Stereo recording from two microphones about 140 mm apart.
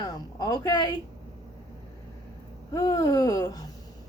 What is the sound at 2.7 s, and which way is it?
Speech, 25° left (ahead or behind).